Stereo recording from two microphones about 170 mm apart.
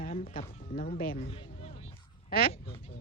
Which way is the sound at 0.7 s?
55° left (ahead or behind).